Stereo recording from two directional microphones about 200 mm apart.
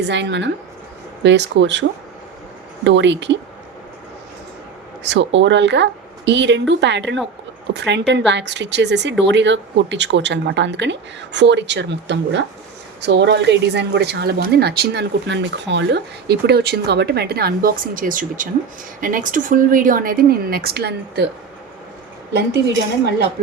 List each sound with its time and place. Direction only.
0.0 s speech: 60° right (ahead or behind)
2.8 s speech: 65° right (ahead or behind)
5.0 s speech: 60° right (ahead or behind)